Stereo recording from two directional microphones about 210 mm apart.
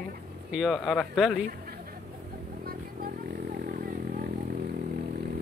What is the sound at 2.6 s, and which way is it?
Vehicle, 45° right (ahead or behind).